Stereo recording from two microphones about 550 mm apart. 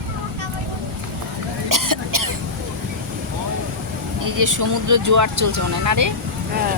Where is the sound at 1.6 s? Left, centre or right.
Right.